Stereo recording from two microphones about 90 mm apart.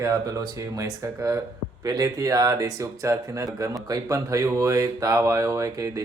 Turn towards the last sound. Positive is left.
turn(degrees=-35)  # may be behind; listen again after turning